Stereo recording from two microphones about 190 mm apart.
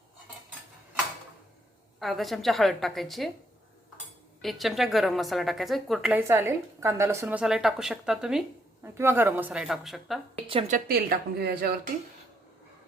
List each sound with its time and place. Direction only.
2.0 s a woman's voice: centre (ahead or behind)
4.4 s a woman's voice: centre (ahead or behind)
10.4 s a woman's voice: 30° right (ahead or behind)
10.7 s speech: 50° right (ahead or behind)